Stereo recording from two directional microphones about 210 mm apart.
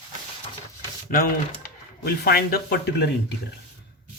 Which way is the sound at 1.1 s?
40° left (ahead or behind).